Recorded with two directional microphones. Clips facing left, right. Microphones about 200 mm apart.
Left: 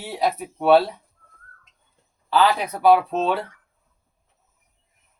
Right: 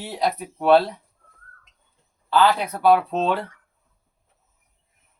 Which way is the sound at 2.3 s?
10° left (ahead or behind).